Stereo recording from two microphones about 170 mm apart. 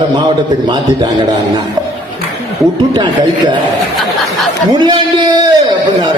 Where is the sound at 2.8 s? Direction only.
30° right (ahead or behind).